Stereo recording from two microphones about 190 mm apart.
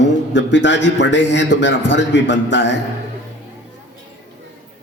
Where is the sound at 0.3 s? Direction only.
70° left (ahead or behind).